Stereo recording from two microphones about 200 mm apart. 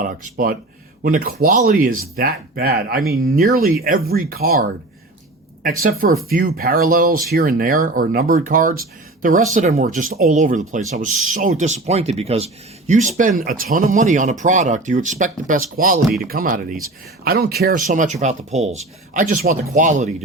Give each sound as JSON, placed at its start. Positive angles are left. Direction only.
{"t": 0.0, "sound": "speech", "side_deg": -45}
{"t": 5.8, "sound": "speech", "side_deg": -45}
{"t": 13.1, "sound": "speech", "side_deg": -40}